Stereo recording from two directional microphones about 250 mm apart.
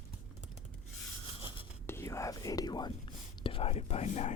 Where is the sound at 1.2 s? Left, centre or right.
Left.